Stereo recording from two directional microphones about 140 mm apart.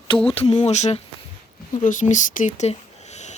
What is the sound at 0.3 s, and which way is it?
Speech, 45° left (ahead or behind).